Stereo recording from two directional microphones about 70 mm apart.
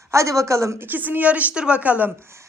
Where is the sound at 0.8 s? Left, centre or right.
Right.